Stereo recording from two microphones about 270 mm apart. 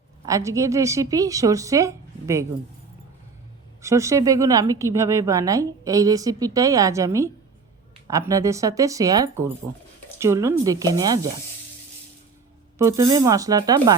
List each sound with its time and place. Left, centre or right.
0.3 s a woman's voice: centre
3.8 s a woman's voice: centre
12.8 s a woman's voice: centre